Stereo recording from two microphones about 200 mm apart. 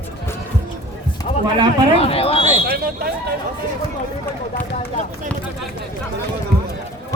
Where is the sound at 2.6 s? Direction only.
50° right (ahead or behind).